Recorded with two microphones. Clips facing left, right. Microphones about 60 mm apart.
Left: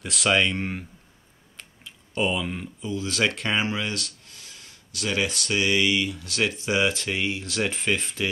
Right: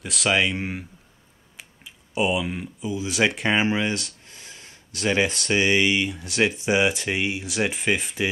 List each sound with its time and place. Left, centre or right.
0.0 s speech: centre